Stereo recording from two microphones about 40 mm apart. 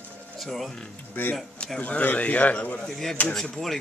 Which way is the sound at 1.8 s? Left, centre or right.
Left.